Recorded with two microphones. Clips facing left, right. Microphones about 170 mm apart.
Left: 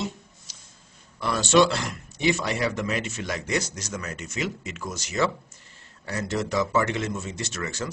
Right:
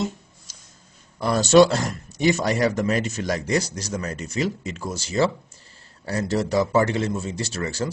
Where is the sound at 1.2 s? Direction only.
40° right (ahead or behind).